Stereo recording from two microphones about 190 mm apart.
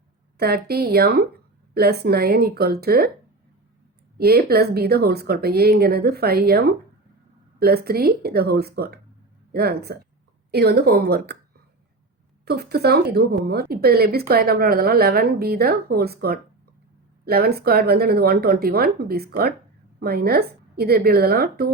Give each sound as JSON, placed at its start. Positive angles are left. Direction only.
{"t": 0.3, "sound": "speech", "side_deg": -55}
{"t": 4.2, "sound": "speech", "side_deg": -55}
{"t": 12.5, "sound": "speech", "side_deg": -60}